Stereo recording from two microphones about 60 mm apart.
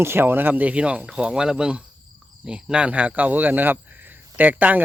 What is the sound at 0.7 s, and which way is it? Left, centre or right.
Speech, right.